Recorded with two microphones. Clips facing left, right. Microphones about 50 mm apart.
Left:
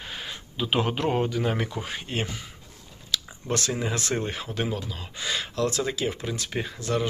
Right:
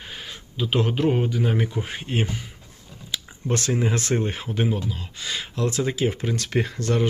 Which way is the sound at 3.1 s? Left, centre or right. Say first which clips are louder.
Left 2 dB; right.